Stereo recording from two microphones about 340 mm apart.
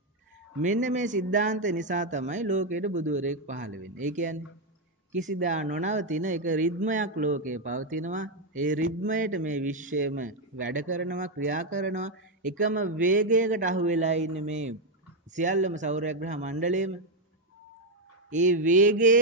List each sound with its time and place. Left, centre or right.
0.6 s speech: right
5.4 s speech: right
18.3 s speech: right